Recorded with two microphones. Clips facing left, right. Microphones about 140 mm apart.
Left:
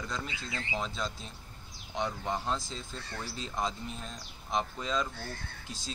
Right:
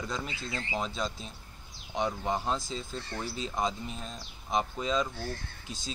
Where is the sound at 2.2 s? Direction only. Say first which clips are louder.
Right 2 dB; 5° right (ahead or behind).